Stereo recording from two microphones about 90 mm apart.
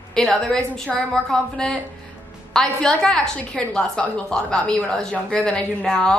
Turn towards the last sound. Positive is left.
turn(degrees=10)  # may be behind; listen again after turning